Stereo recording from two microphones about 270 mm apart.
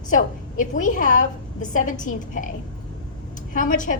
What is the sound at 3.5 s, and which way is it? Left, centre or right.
Speech, left.